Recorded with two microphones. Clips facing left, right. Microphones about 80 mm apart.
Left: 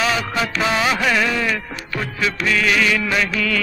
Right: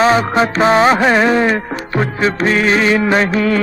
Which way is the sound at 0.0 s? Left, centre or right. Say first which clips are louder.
Right 9 dB; right.